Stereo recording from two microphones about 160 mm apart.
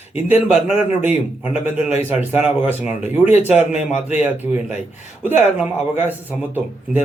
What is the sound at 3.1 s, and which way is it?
A man's voice, 10° right (ahead or behind).